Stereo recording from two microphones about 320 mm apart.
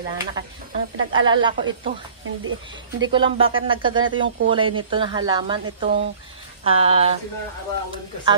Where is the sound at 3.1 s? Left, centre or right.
Centre.